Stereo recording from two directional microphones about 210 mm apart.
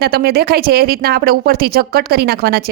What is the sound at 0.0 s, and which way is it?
Speech, 50° right (ahead or behind).